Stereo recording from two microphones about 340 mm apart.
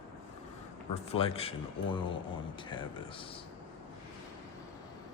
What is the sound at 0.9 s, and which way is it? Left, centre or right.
Speech, centre.